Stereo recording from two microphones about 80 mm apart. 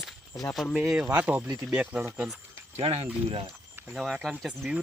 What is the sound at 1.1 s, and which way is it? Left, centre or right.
Speech, centre.